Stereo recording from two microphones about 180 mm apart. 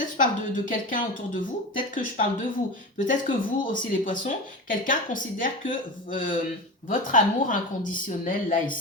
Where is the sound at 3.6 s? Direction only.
50° left (ahead or behind).